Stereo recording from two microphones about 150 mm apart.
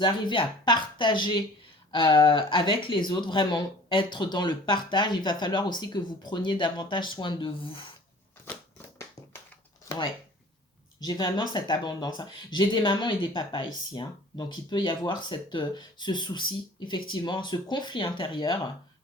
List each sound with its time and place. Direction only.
0.0 s speech: 35° left (ahead or behind)
11.0 s speech: 25° left (ahead or behind)